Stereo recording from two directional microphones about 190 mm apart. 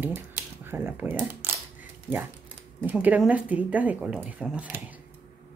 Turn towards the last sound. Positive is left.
turn(degrees=-10)  # may be behind; listen again after turning